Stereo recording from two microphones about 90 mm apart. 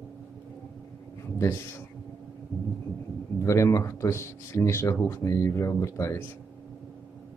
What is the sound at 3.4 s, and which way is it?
Speech, 35° left (ahead or behind).